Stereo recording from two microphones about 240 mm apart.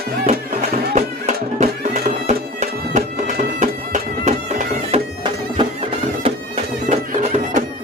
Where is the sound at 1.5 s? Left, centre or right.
Right.